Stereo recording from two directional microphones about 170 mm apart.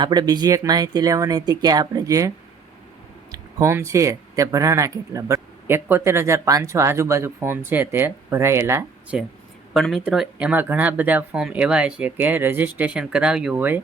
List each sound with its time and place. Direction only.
0.0 s speech: 25° right (ahead or behind)
3.3 s speech: 15° right (ahead or behind)
9.7 s speech: centre (ahead or behind)